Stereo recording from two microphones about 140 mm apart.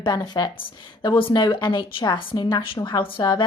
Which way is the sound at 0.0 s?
30° left (ahead or behind).